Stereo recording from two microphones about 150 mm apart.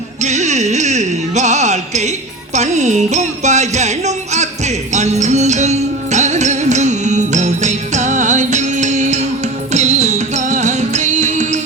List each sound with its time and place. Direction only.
0.2 s music: 50° right (ahead or behind)